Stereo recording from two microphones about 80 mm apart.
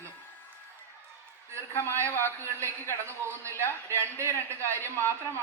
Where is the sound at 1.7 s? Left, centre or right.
Left.